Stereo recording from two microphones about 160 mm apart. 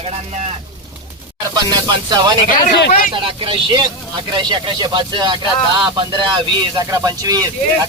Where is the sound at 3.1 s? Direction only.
35° right (ahead or behind).